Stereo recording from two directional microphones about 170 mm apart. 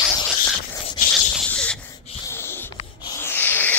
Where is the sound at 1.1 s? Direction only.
5° left (ahead or behind).